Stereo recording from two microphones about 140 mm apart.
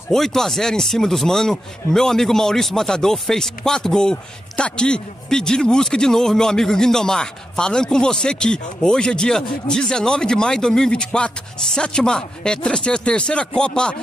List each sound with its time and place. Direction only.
0.1 s speech: 5° left (ahead or behind)